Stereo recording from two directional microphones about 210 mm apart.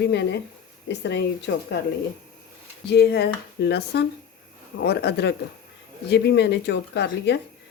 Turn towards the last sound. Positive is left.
turn(degrees=55)  # may be behind; listen again after turning